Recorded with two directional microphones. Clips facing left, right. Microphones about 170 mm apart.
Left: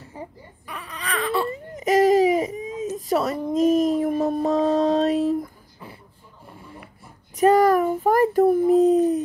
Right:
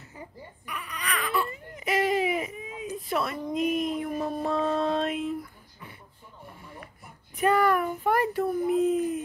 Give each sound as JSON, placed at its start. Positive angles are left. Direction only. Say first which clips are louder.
{"t": 0.0, "sound": "baby cry", "louder": "left 6 dB", "side_deg": 30}
{"t": 1.8, "sound": "baby cry", "louder": "left 9 dB", "side_deg": 40}
{"t": 7.3, "sound": "a sound", "louder": "left 7 dB", "side_deg": 40}